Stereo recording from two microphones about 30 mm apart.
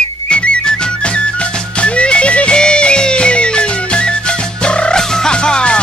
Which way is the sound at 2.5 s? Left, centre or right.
Left.